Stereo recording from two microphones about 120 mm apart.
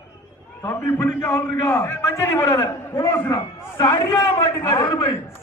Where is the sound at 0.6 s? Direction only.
15° left (ahead or behind).